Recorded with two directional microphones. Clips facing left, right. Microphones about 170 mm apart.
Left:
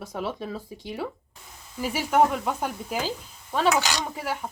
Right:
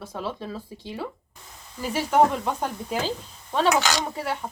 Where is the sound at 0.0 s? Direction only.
15° left (ahead or behind).